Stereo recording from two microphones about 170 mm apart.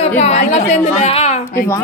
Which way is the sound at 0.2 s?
40° left (ahead or behind).